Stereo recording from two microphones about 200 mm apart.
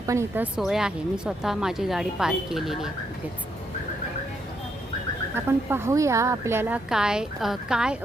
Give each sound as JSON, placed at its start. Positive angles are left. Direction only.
{"t": 0.0, "sound": "speech", "side_deg": -15}
{"t": 5.3, "sound": "a woman's voice", "side_deg": -10}